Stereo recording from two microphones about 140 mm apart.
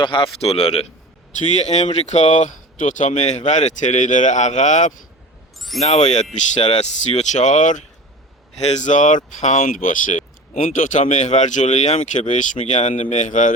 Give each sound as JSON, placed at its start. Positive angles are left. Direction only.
{"t": 0.0, "sound": "speech", "side_deg": 40}